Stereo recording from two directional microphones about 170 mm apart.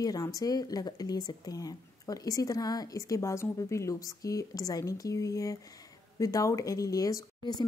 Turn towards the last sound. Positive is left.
turn(degrees=25)  # may be behind; listen again after turning